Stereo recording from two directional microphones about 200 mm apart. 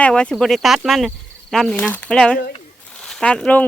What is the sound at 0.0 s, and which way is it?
Speech, 5° left (ahead or behind).